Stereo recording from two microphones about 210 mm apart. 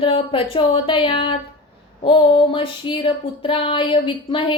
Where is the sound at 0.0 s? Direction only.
25° left (ahead or behind).